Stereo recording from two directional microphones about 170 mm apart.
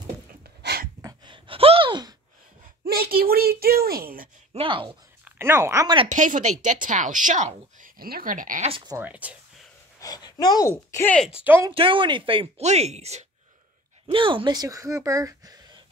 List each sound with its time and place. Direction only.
0.6 s a sound: 70° right (ahead or behind)
1.0 s a sound: 30° right (ahead or behind)
2.8 s a sound: 60° right (ahead or behind)
4.6 s speech: 30° right (ahead or behind)
5.2 s speech: 15° right (ahead or behind)
6.0 s a woman's voice: 50° right (ahead or behind)
8.6 s speech: 30° right (ahead or behind)
8.9 s speech: 10° right (ahead or behind)
9.9 s speech: 20° left (ahead or behind)
11.1 s speech: 5° right (ahead or behind)
11.7 s speech: 30° right (ahead or behind)
14.1 s speech: 30° right (ahead or behind)